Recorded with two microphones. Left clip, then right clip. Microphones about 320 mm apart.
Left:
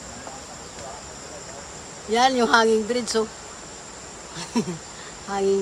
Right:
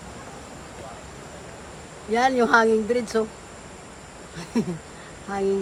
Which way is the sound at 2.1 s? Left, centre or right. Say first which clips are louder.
Left 1 dB; centre.